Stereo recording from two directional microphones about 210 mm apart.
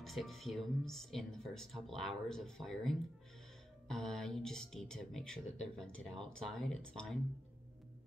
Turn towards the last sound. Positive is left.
turn(degrees=5)  # may be behind; listen again after turning